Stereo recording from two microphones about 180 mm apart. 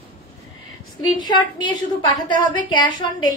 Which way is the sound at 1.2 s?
25° left (ahead or behind).